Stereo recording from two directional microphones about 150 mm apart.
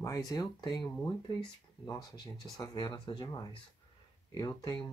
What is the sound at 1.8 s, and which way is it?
Speech, 30° left (ahead or behind).